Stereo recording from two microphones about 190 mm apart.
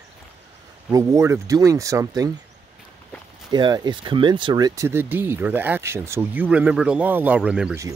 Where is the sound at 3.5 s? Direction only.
20° right (ahead or behind); by 7.8 s 5° right (ahead or behind).